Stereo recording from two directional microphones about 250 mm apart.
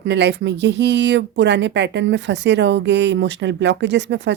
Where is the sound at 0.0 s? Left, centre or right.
Right.